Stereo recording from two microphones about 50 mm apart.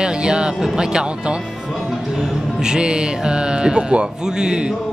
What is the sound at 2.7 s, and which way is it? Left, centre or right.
Speech, centre.